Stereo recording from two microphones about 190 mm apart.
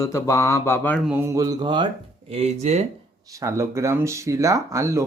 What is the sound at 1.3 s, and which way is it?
Speech, 20° right (ahead or behind).